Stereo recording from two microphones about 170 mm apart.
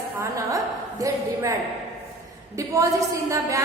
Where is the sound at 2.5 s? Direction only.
20° right (ahead or behind).